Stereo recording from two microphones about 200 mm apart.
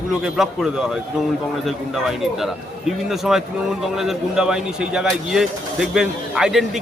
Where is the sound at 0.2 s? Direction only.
Centre (ahead or behind).